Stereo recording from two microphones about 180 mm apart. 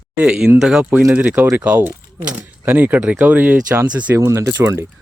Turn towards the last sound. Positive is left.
turn(degrees=-15)  # may be behind; listen again after turning